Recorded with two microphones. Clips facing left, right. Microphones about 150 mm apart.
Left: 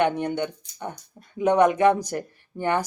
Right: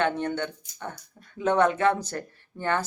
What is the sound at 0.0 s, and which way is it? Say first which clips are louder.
Speech: left 3 dB; 15° left (ahead or behind).